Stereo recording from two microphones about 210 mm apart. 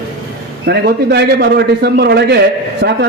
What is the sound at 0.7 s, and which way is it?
A man's voice, 50° right (ahead or behind).